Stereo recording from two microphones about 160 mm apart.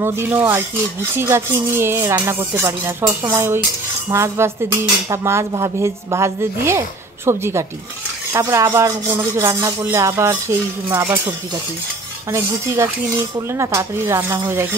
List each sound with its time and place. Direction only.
0.0 s rub: 10° right (ahead or behind)